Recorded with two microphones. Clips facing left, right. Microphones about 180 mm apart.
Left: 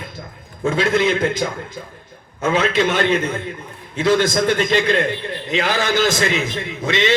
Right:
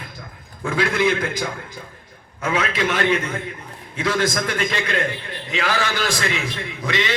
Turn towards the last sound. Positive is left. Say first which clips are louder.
# left 5 dB
turn(degrees=25)  # may be behind; listen again after turning